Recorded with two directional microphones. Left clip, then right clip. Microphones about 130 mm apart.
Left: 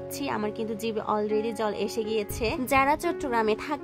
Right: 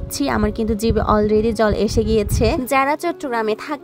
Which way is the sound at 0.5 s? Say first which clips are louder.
Right 10 dB; 35° right (ahead or behind).